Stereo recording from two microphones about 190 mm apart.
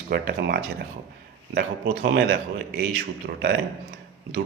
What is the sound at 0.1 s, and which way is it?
A man's voice, 55° right (ahead or behind).